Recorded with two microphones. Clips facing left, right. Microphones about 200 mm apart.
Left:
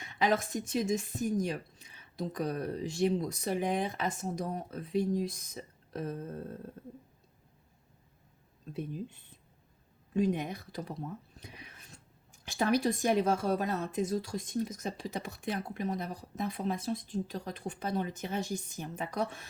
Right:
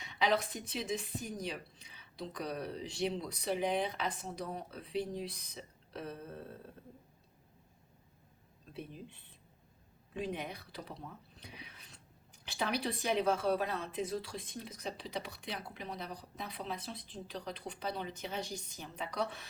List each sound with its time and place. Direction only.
0.0 s speech: 50° left (ahead or behind)
8.7 s speech: 45° left (ahead or behind)